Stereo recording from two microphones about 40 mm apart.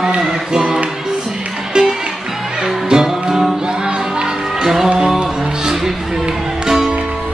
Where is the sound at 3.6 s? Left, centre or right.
Right.